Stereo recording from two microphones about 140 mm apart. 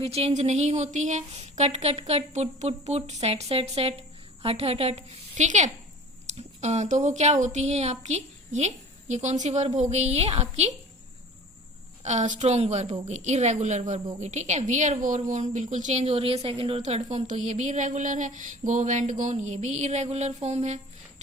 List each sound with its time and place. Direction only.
0.0 s a woman's voice: 45° right (ahead or behind)
12.0 s a woman's voice: 60° right (ahead or behind)